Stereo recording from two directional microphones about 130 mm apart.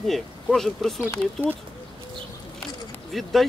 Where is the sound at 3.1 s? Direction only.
Centre (ahead or behind).